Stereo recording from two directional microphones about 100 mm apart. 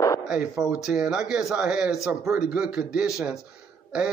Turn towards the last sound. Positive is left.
turn(degrees=-10)  # may be behind; listen again after turning